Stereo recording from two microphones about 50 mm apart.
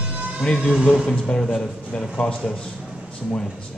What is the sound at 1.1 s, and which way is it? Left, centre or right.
Speech, centre.